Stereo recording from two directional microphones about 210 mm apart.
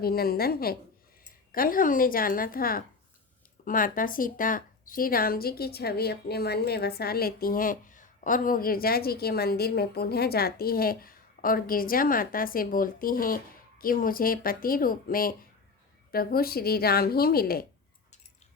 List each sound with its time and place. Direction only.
0.0 s speech: 45° left (ahead or behind)